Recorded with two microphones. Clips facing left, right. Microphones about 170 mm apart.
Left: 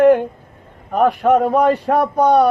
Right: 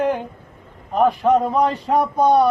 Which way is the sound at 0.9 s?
60° left (ahead or behind).